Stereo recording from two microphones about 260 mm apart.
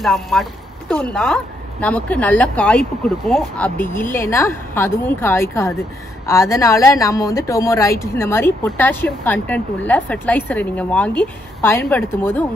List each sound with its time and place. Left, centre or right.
0.0 s a woman's voice: centre